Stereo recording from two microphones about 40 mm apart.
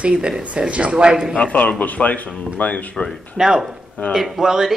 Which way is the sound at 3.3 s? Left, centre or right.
Centre.